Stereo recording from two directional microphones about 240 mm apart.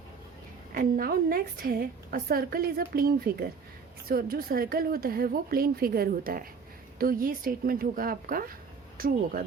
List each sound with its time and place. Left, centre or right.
0.7 s a woman's voice: right